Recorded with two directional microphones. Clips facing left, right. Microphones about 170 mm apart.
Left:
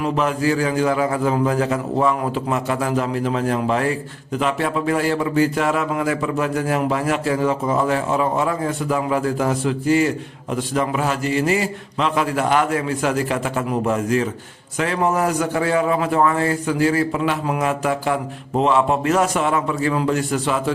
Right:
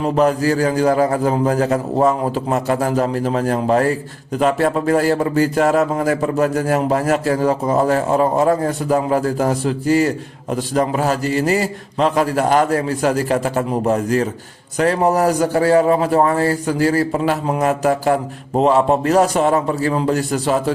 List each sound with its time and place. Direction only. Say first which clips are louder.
0.0 s a man's voice: right 4 dB; 40° right (ahead or behind)